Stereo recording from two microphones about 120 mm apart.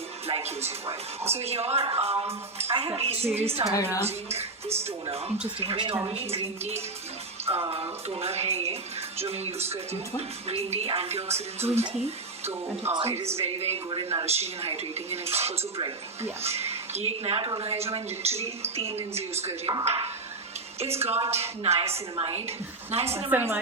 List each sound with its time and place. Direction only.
0.3 s speech: 55° right (ahead or behind)
4.8 s speech: 55° right (ahead or behind)
5.5 s speech: 45° right (ahead or behind)
6.1 s speech: 55° right (ahead or behind)
12.5 s speech: 20° right (ahead or behind)
13.1 s speech: 60° right (ahead or behind)
13.9 s speech: 45° right (ahead or behind); by 23.1 s 60° right (ahead or behind)
23.3 s speech: 20° right (ahead or behind)